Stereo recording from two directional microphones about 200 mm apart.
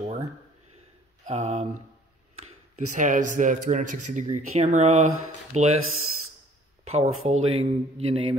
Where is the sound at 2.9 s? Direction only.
40° right (ahead or behind).